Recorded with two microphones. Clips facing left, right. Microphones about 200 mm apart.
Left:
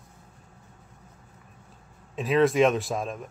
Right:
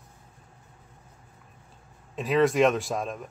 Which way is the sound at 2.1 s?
Centre (ahead or behind).